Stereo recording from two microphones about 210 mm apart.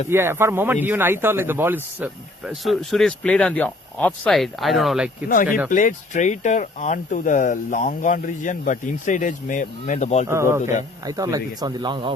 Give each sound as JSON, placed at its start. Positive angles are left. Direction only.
{"t": 0.1, "sound": "speech", "side_deg": -10}
{"t": 5.7, "sound": "speech", "side_deg": 35}
{"t": 10.2, "sound": "speech", "side_deg": -15}
{"t": 10.6, "sound": "speech", "side_deg": 35}
{"t": 11.0, "sound": "speech", "side_deg": -15}